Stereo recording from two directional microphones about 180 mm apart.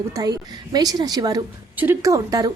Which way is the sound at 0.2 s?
20° right (ahead or behind).